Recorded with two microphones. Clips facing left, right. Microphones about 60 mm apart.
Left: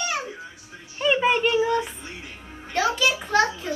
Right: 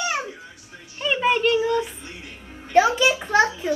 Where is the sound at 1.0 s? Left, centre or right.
Centre.